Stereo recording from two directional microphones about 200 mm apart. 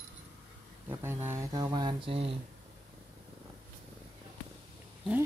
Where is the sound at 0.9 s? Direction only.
15° right (ahead or behind); by 2.3 s 30° right (ahead or behind).